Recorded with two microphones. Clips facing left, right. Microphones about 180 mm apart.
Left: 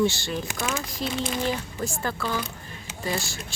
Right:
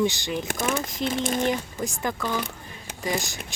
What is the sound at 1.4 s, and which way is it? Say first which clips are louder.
Speech: right 2 dB; 15° right (ahead or behind).